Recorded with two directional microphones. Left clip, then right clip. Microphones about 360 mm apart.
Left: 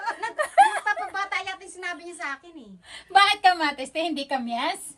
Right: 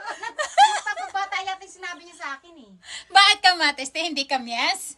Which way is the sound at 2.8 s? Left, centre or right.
Centre.